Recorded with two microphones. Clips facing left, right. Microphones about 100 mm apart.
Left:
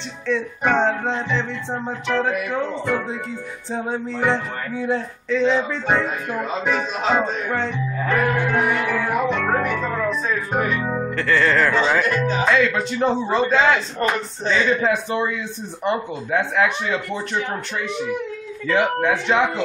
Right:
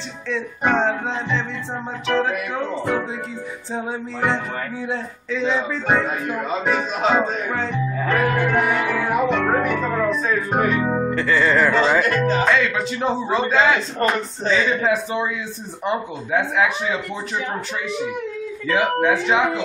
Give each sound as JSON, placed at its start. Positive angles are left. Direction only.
{"t": 0.3, "sound": "speech", "side_deg": 0}
{"t": 18.7, "sound": "speech", "side_deg": 0}